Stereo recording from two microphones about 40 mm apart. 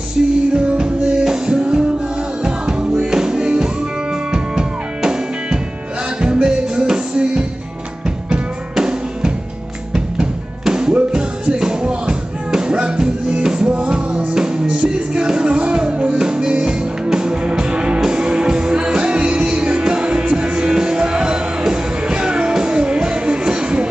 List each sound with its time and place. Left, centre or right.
0.2 s music: right
10.7 s music: centre